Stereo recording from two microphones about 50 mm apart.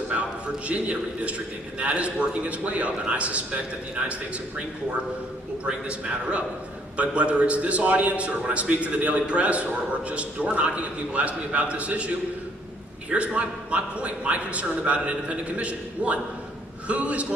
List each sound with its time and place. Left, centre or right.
0.1 s a man's voice: right
5.6 s a man's voice: right